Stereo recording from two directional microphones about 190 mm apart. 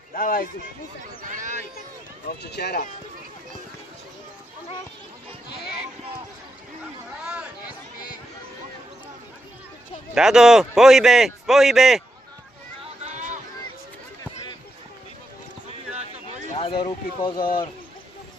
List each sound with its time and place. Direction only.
0.1 s speech: 45° left (ahead or behind)
1.2 s speech: 40° right (ahead or behind)
2.4 s speech: 60° left (ahead or behind)
7.3 s chatter: 5° right (ahead or behind)
10.2 s a man's voice: 5° right (ahead or behind)
13.1 s chatter: 40° right (ahead or behind)
16.6 s speech: 30° left (ahead or behind)